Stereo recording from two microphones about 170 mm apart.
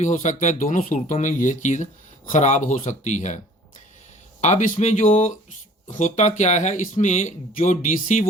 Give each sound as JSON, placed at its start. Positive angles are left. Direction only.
{"t": 0.0, "sound": "speech", "side_deg": 45}